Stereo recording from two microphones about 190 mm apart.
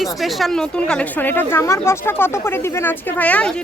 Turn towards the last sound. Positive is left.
turn(degrees=5)  # may be behind; listen again after turning